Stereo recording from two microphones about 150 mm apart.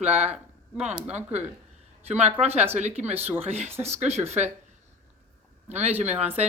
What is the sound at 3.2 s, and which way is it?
Speech, 15° right (ahead or behind).